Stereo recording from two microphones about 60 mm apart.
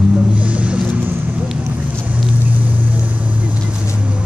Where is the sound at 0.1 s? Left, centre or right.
Right.